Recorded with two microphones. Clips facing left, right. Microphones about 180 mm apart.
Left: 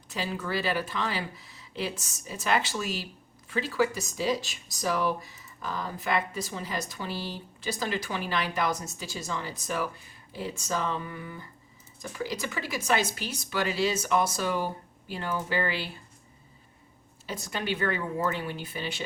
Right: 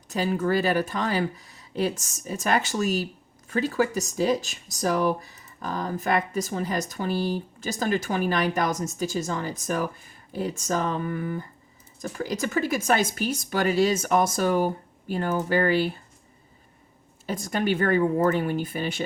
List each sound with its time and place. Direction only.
0.1 s speech: 45° right (ahead or behind)
17.2 s speech: 50° right (ahead or behind)